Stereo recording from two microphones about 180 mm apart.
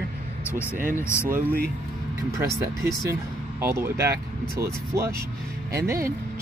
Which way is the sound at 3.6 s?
15° right (ahead or behind).